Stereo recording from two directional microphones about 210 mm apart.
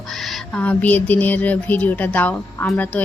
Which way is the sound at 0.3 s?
5° left (ahead or behind).